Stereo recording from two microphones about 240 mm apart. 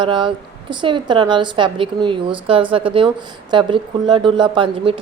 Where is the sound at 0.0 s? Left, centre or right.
Centre.